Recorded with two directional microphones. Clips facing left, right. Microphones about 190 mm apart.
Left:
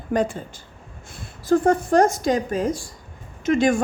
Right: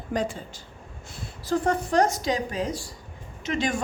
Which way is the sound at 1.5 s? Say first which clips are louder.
Left 7 dB; 50° left (ahead or behind).